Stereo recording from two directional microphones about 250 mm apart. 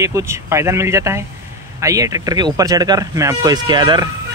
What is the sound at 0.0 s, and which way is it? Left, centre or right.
Speech, centre.